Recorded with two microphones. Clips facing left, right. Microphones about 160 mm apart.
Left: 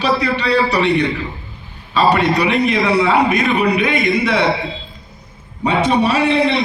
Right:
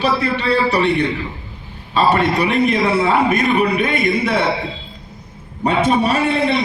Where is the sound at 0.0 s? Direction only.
55° right (ahead or behind).